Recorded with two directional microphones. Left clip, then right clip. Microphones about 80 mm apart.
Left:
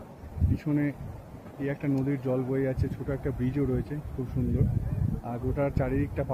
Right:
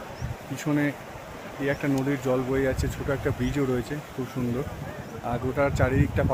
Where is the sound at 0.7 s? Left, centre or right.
Right.